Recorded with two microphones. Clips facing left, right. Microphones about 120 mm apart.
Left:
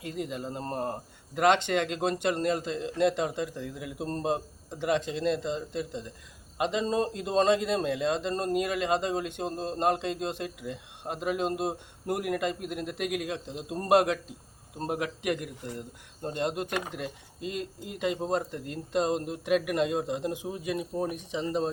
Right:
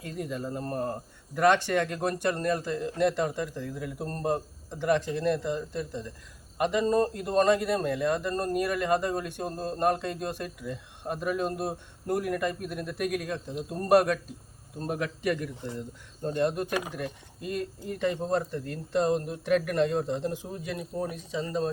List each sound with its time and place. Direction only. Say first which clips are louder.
0.0 s a man's voice: even; 20° left (ahead or behind)
16.9 s speech: right 1 dB; 20° left (ahead or behind)